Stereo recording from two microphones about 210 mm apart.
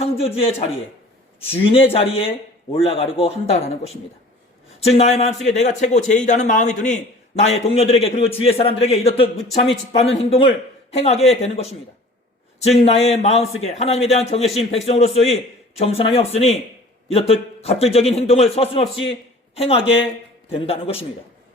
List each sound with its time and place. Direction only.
0.0 s a man's voice: 30° left (ahead or behind)